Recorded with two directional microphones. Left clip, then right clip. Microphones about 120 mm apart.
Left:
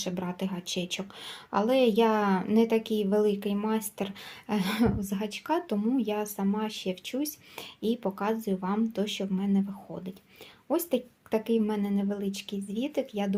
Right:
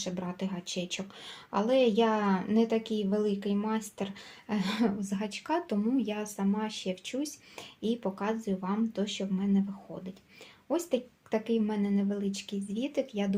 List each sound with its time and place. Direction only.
0.0 s a woman's voice: 55° left (ahead or behind)